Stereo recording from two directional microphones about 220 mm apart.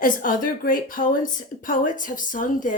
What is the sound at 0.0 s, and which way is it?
Speech, 40° left (ahead or behind).